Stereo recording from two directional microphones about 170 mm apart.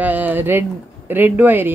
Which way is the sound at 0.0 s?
10° right (ahead or behind).